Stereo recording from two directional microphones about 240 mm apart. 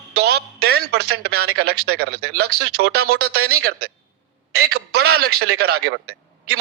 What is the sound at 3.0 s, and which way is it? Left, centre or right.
Speech, right.